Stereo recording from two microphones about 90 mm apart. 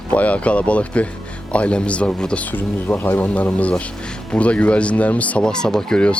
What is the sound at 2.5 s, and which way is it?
Speech, 25° left (ahead or behind).